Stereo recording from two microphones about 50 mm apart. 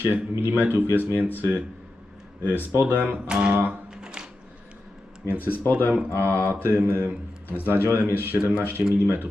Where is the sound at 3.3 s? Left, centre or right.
Centre.